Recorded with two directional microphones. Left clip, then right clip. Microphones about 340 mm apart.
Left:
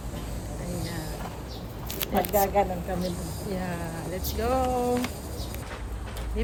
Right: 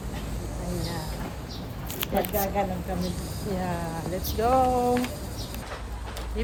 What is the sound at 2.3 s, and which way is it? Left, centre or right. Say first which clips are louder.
Speech: left 8 dB; centre.